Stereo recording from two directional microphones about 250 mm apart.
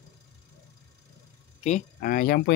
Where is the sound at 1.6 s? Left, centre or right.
Left.